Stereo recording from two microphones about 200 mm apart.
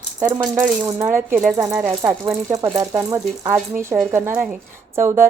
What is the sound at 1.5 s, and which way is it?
Speech, 15° right (ahead or behind).